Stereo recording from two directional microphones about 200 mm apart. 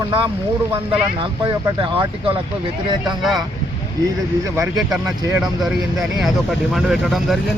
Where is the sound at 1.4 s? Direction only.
25° right (ahead or behind).